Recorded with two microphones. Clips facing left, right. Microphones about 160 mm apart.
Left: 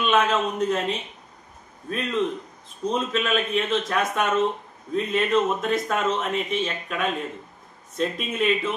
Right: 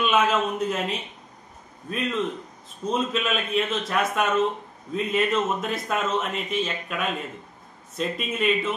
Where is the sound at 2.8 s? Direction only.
Centre (ahead or behind).